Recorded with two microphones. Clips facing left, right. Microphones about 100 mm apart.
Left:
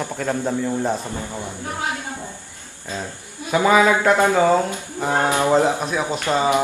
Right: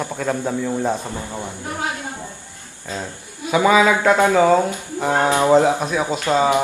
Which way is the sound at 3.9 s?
15° right (ahead or behind).